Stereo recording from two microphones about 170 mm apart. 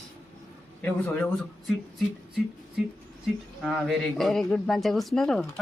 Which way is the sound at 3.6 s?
Centre (ahead or behind).